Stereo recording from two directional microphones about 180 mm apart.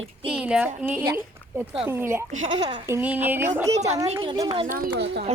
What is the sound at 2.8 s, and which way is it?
Speech, 10° right (ahead or behind).